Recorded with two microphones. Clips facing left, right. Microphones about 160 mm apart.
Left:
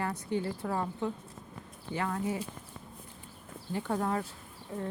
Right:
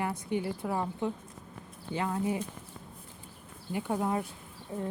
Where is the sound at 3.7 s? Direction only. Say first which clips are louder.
Right 1 dB; 15° right (ahead or behind).